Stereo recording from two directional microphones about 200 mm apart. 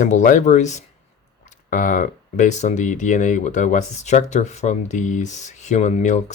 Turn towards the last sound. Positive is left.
turn(degrees=40)  # may be behind; listen again after turning